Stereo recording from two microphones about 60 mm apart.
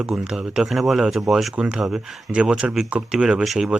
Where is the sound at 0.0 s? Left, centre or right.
Centre.